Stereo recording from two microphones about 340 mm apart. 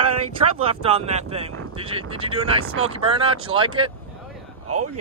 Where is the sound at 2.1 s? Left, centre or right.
Right.